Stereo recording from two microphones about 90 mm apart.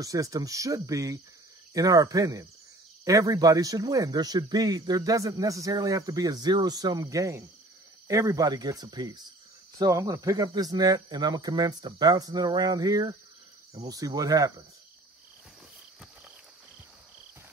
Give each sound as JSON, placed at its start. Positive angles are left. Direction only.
{"t": 0.0, "sound": "speech", "side_deg": -40}